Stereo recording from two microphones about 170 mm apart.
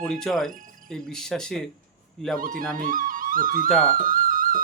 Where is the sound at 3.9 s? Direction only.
55° right (ahead or behind).